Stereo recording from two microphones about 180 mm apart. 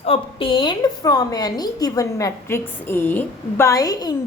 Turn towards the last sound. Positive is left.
turn(degrees=20)  # may be behind; listen again after turning